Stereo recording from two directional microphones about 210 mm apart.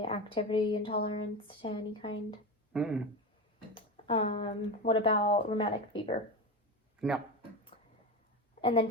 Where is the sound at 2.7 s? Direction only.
5° right (ahead or behind).